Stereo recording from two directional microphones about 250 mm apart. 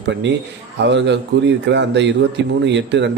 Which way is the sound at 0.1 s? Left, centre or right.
Right.